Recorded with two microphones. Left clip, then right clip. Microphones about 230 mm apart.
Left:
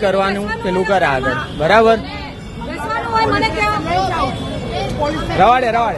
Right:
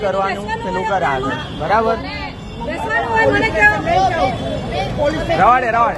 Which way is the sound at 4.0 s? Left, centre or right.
Left.